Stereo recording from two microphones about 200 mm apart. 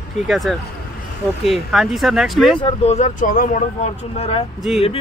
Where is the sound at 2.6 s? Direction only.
30° left (ahead or behind).